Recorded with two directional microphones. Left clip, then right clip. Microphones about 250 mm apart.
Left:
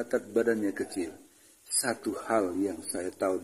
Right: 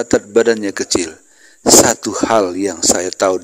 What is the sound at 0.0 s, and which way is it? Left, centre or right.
Speech, right.